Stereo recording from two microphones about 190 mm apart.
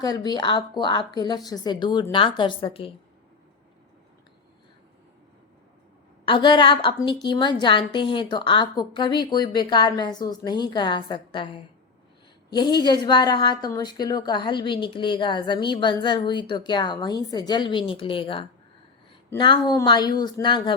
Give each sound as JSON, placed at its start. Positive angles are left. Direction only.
{"t": 0.0, "sound": "a woman's voice", "side_deg": 20}
{"t": 6.2, "sound": "a woman's voice", "side_deg": 25}